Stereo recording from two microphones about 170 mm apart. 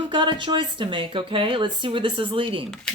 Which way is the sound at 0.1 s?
30° right (ahead or behind).